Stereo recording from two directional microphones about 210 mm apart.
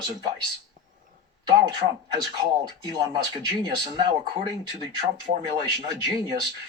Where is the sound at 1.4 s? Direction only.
20° right (ahead or behind).